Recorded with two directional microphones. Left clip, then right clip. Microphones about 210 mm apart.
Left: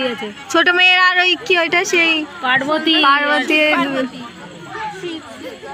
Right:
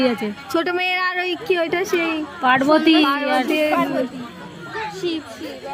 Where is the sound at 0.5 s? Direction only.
Centre (ahead or behind).